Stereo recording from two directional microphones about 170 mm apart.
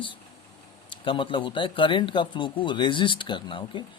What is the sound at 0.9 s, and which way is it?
Speech, 30° left (ahead or behind).